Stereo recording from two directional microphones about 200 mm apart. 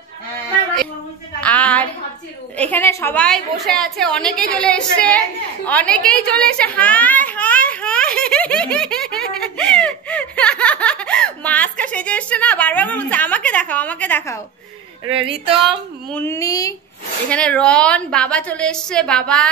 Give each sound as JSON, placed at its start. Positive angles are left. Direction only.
{"t": 1.4, "sound": "a sound", "side_deg": 5}
{"t": 2.5, "sound": "a woman's voice", "side_deg": 10}
{"t": 5.7, "sound": "a sound", "side_deg": 5}
{"t": 15.1, "sound": "a woman's voice", "side_deg": -25}
{"t": 15.6, "sound": "speech", "side_deg": 5}
{"t": 17.3, "sound": "a woman's voice", "side_deg": 5}